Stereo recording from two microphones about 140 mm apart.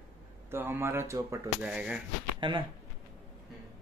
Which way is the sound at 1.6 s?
5° right (ahead or behind).